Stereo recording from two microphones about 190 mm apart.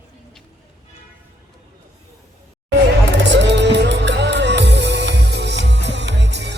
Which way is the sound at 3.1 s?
65° right (ahead or behind).